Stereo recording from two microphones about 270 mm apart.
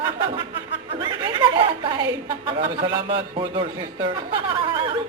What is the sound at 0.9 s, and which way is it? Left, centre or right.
Speech, centre.